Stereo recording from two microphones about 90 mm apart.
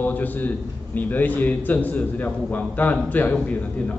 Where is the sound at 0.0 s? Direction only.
20° left (ahead or behind).